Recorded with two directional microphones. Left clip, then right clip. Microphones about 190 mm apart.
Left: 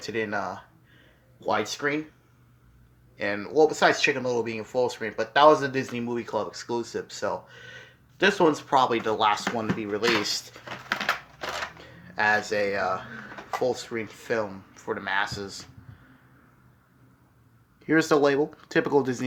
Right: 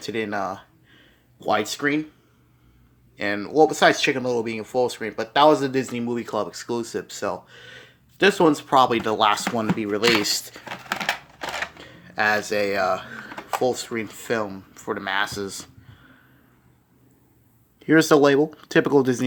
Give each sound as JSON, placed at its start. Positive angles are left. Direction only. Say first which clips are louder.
{"t": 0.0, "sound": "speech", "louder": "right 3 dB", "side_deg": -35}
{"t": 3.2, "sound": "speech", "louder": "right 3 dB", "side_deg": -40}
{"t": 11.0, "sound": "a sound", "louder": "right 2 dB", "side_deg": 0}
{"t": 11.8, "sound": "speech", "louder": "right 3 dB", "side_deg": -40}
{"t": 17.7, "sound": "speech", "louder": "right 5 dB", "side_deg": -30}